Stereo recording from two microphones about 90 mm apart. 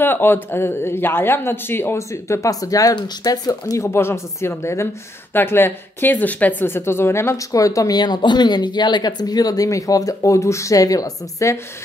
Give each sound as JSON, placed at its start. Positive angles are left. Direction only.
{"t": 0.0, "sound": "speech", "side_deg": 25}